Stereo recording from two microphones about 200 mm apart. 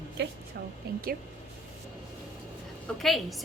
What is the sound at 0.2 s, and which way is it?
Speech, 60° right (ahead or behind).